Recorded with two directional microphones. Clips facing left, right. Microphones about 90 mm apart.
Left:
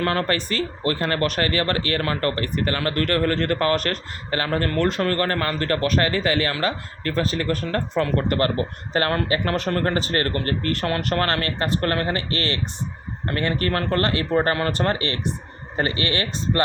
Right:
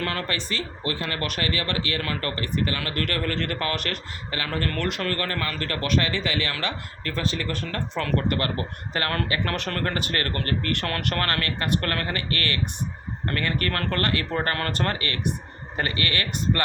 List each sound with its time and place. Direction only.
0.0 s speech: 40° left (ahead or behind)
4.7 s speech: 25° left (ahead or behind)